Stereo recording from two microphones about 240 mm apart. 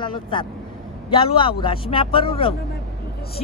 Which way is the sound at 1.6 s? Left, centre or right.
Left.